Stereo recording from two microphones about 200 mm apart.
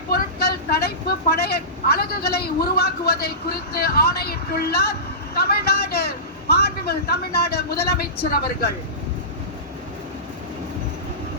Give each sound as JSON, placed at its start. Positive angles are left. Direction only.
{"t": 0.1, "sound": "vehicle", "side_deg": 50}